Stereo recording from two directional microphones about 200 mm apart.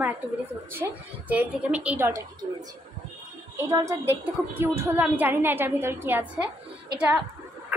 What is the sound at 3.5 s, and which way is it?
A woman's voice, 15° right (ahead or behind).